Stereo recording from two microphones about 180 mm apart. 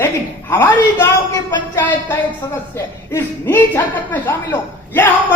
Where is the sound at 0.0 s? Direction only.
15° left (ahead or behind).